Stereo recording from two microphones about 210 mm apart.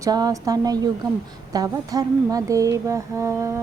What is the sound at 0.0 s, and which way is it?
A woman's voice, 20° right (ahead or behind).